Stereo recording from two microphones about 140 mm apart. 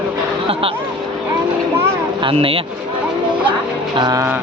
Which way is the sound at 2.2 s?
40° right (ahead or behind).